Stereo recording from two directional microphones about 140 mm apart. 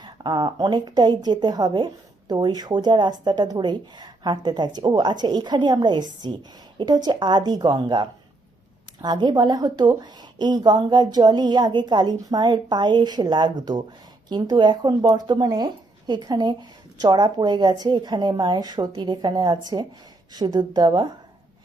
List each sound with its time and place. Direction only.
0.0 s a woman's voice: 35° right (ahead or behind)